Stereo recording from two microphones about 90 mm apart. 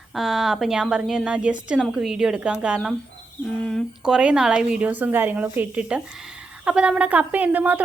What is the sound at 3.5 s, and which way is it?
Speech, 10° left (ahead or behind).